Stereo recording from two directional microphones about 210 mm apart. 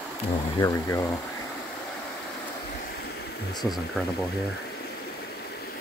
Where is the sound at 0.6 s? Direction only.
15° left (ahead or behind).